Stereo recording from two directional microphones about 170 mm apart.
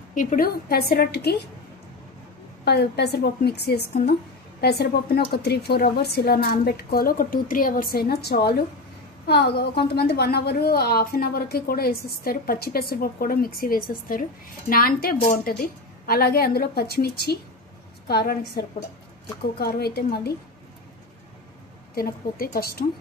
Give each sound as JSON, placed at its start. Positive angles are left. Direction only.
{"t": 0.1, "sound": "a woman's voice", "side_deg": 50}
{"t": 2.6, "sound": "a woman's voice", "side_deg": 75}
{"t": 19.6, "sound": "a woman's voice", "side_deg": 70}
{"t": 21.9, "sound": "a woman's voice", "side_deg": 60}